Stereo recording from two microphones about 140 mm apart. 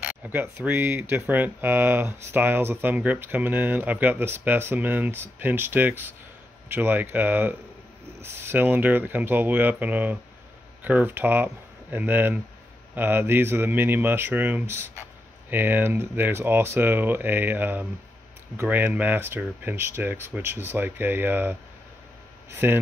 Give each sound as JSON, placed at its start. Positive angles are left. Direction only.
{"t": 0.0, "sound": "speech", "side_deg": -10}